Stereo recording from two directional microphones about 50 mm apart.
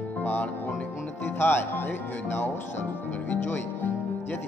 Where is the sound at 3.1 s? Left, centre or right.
Left.